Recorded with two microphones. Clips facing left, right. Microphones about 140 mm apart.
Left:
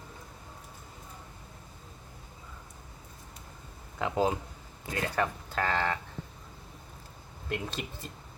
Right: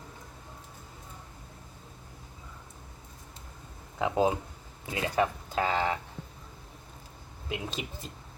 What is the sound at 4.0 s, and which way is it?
Speech, 15° right (ahead or behind).